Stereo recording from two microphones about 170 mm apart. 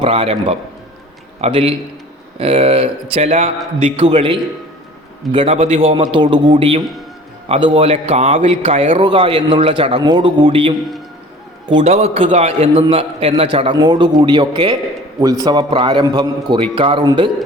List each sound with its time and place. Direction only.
0.0 s a man's voice: 35° right (ahead or behind)